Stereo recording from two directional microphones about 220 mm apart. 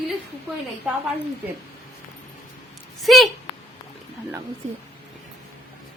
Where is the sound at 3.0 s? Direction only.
Centre (ahead or behind).